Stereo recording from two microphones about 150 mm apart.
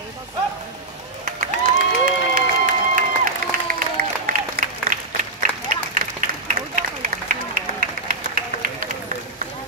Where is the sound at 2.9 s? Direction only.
65° right (ahead or behind).